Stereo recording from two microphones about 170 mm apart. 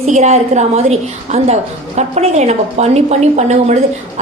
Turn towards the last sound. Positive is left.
turn(degrees=-40)  # may be behind; listen again after turning